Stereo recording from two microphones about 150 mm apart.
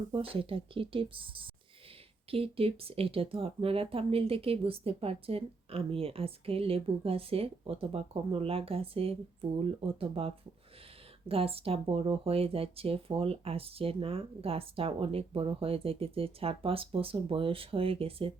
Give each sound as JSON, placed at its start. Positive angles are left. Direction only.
{"t": 0.1, "sound": "speech", "side_deg": -40}